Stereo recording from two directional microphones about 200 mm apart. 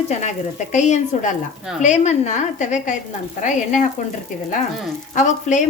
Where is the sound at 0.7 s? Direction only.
35° left (ahead or behind).